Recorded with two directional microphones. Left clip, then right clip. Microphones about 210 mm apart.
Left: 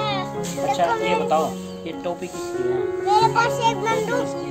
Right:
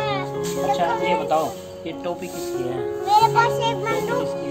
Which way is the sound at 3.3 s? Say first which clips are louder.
Even; 30° left (ahead or behind).